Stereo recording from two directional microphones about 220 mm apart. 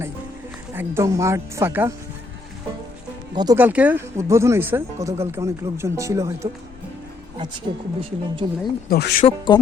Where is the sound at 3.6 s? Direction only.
5° right (ahead or behind).